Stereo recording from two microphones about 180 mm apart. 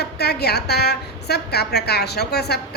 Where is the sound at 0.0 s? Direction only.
65° left (ahead or behind).